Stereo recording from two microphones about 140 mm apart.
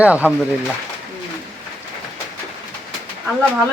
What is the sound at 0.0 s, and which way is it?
Speech, 10° right (ahead or behind).